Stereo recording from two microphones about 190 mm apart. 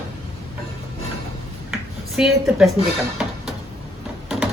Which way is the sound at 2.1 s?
Centre (ahead or behind).